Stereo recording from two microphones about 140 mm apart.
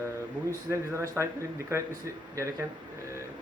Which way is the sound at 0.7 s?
20° right (ahead or behind).